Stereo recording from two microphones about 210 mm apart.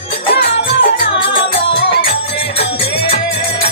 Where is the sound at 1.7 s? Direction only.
50° left (ahead or behind).